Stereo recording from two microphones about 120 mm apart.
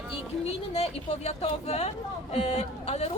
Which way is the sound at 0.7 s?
60° left (ahead or behind).